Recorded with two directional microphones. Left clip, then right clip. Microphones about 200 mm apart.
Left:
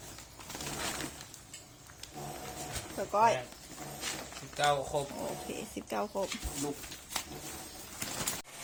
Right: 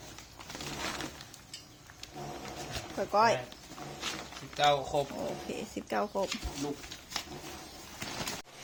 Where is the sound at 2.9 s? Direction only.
20° right (ahead or behind).